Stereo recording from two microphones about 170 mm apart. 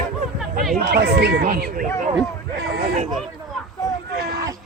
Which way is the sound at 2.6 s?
70° right (ahead or behind).